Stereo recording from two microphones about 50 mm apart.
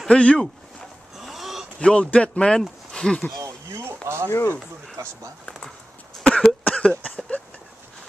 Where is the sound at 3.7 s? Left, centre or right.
Right.